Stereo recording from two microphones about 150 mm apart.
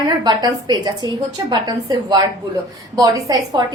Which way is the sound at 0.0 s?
25° right (ahead or behind).